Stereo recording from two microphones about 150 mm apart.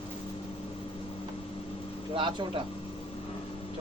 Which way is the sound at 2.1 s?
35° right (ahead or behind).